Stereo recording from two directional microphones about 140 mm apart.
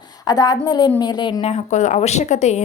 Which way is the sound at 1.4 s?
50° left (ahead or behind).